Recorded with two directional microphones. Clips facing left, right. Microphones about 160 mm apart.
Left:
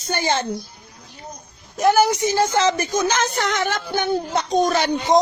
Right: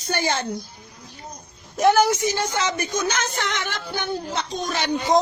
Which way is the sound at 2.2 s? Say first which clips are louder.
Left 6 dB; 30° left (ahead or behind).